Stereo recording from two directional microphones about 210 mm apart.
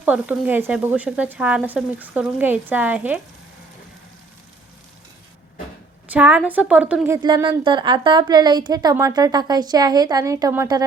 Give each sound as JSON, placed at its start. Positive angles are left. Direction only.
{"t": 0.0, "sound": "speech", "side_deg": -5}
{"t": 6.1, "sound": "speech", "side_deg": -5}
{"t": 7.2, "sound": "speech", "side_deg": -20}